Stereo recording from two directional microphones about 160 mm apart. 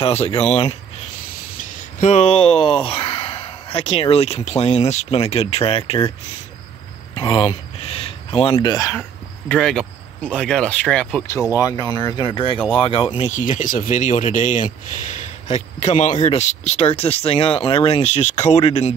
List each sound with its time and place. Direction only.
0.0 s speech: 40° left (ahead or behind)
2.0 s speech: 40° left (ahead or behind)
7.2 s speech: 35° left (ahead or behind); by 9.0 s 20° left (ahead or behind)
9.5 s speech: 5° left (ahead or behind)
11.2 s speech: 20° left (ahead or behind)
13.2 s speech: 50° left (ahead or behind)